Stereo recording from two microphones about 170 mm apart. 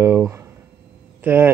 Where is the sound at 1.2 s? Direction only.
10° right (ahead or behind).